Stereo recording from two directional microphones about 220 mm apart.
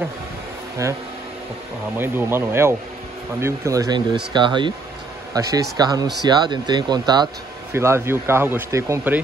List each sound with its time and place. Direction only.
2.0 s speech: 10° right (ahead or behind)